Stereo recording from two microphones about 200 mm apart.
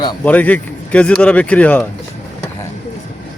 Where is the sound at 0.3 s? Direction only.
10° left (ahead or behind).